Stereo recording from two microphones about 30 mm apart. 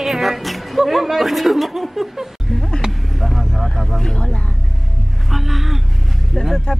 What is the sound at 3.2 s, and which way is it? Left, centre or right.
Vehicle, centre.